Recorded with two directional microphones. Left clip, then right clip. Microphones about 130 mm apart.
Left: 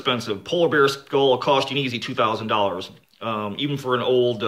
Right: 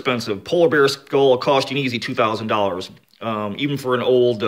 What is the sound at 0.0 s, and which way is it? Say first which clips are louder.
Speech: right 2 dB; 50° right (ahead or behind).